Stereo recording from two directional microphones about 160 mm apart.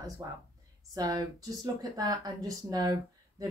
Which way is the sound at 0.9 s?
25° right (ahead or behind).